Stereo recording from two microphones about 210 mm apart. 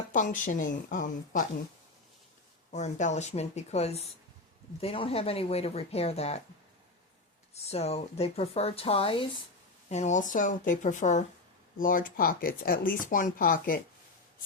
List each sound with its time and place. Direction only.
0.1 s speech: 40° left (ahead or behind)
2.7 s speech: 35° left (ahead or behind)
7.5 s speech: 30° left (ahead or behind)